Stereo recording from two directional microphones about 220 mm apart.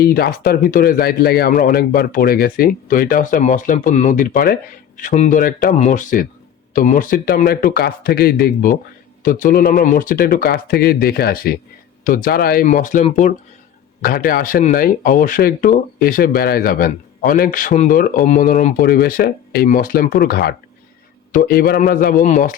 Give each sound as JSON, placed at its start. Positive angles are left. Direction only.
{"t": 0.0, "sound": "speech", "side_deg": 45}